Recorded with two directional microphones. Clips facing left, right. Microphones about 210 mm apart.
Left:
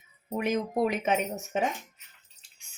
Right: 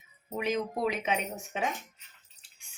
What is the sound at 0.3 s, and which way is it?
A woman's voice, 50° left (ahead or behind).